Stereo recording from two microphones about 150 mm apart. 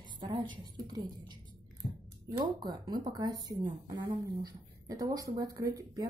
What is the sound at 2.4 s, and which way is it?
A woman's voice, 30° right (ahead or behind).